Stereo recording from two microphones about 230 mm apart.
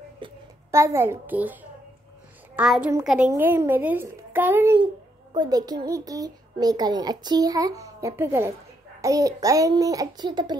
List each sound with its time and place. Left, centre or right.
0.2 s a child's voice: centre